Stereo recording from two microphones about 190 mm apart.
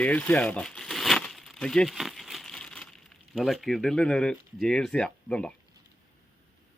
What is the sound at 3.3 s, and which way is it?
Speech, centre (ahead or behind).